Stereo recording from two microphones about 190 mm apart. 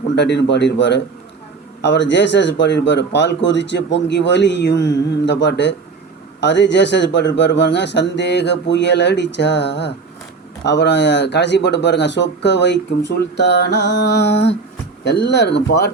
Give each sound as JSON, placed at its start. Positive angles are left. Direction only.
{"t": 0.2, "sound": "speech", "side_deg": 65}